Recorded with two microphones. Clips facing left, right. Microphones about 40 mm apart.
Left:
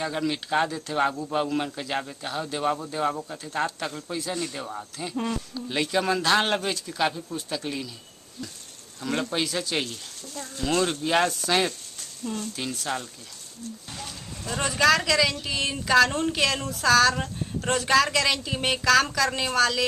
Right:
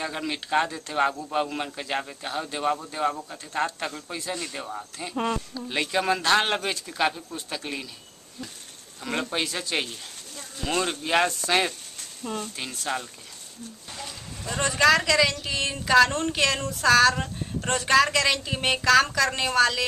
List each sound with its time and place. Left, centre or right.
0.0 s speech: centre
5.1 s speech: centre
9.0 s speech: centre
12.2 s speech: right
12.5 s speech: centre